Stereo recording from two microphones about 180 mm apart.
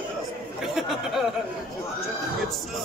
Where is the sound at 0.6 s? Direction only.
Centre (ahead or behind).